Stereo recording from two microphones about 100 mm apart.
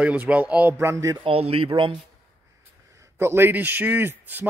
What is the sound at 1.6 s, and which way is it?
Speech, 55° right (ahead or behind).